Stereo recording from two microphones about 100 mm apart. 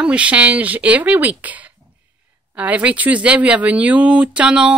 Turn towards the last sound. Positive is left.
turn(degrees=-10)  # may be behind; listen again after turning